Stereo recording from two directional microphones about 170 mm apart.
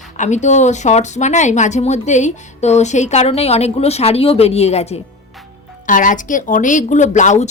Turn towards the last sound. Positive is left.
turn(degrees=45)  # may be behind; listen again after turning